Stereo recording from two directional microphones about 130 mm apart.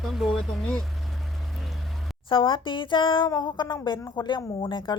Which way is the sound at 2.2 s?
40° left (ahead or behind).